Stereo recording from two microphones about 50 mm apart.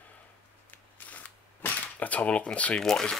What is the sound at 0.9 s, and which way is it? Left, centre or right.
Camera, left.